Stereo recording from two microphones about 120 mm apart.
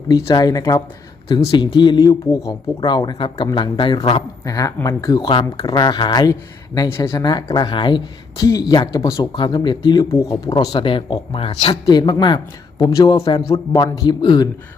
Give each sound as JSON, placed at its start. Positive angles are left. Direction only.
{"t": 0.3, "sound": "speech", "side_deg": 30}
{"t": 3.9, "sound": "speech", "side_deg": 30}
{"t": 6.7, "sound": "speech", "side_deg": 20}
{"t": 8.4, "sound": "speech", "side_deg": 30}
{"t": 9.3, "sound": "speech", "side_deg": 40}
{"t": 10.1, "sound": "speech", "side_deg": 25}
{"t": 11.9, "sound": "speech", "side_deg": 35}
{"t": 13.2, "sound": "speech", "side_deg": 55}
{"t": 13.7, "sound": "speech", "side_deg": 30}